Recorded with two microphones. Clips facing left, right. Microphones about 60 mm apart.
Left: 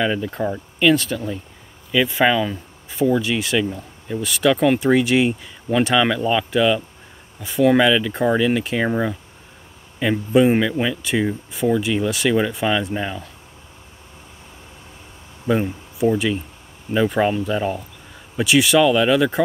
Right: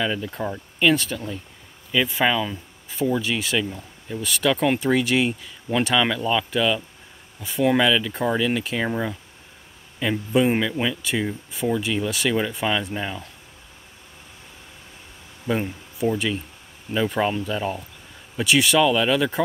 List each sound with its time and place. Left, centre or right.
0.0 s speech: left
0.7 s speech: centre
2.2 s speech: centre
8.8 s speech: left
9.9 s speech: centre
15.4 s speech: centre